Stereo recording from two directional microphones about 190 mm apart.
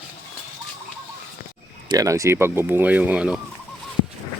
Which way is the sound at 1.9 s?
15° right (ahead or behind).